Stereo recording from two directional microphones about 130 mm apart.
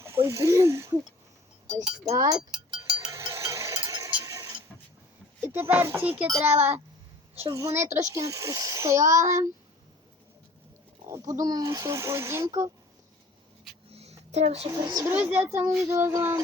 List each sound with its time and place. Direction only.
0.0 s speech: 25° right (ahead or behind)
2.0 s speech: 25° right (ahead or behind)
2.6 s cowbell: 35° right (ahead or behind)
3.1 s mechanisms: 25° right (ahead or behind)
3.8 s a sound: 30° right (ahead or behind)
5.5 s a child's voice: 15° right (ahead or behind)
7.8 s a child's voice: 60° right (ahead or behind)
8.0 s speech: 25° right (ahead or behind)
11.1 s speech: 25° right (ahead or behind)
13.9 s a sound: 55° right (ahead or behind)
14.7 s speech: 25° right (ahead or behind)
15.0 s a child's voice: 15° right (ahead or behind)